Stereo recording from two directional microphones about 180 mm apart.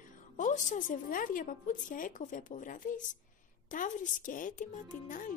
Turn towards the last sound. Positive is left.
turn(degrees=45)  # may be behind; listen again after turning